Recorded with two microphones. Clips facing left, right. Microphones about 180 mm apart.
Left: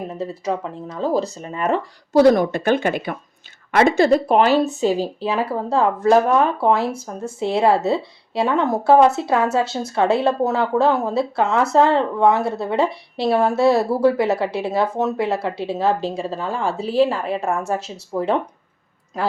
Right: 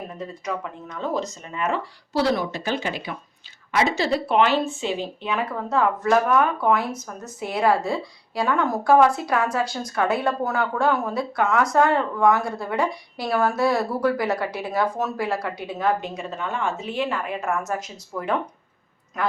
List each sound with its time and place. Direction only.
0.2 s speech: 30° left (ahead or behind)